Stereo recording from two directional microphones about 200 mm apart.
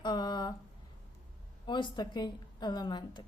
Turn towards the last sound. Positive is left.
turn(degrees=20)  # may be behind; listen again after turning